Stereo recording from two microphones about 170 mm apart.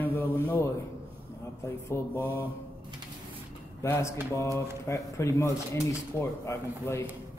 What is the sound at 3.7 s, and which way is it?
Speech, 15° left (ahead or behind).